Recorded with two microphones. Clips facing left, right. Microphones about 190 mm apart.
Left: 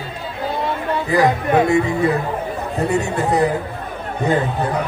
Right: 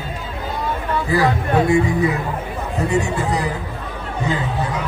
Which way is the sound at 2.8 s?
60° left (ahead or behind).